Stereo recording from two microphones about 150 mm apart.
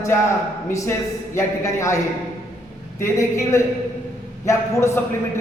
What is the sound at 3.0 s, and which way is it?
Speech, 20° left (ahead or behind).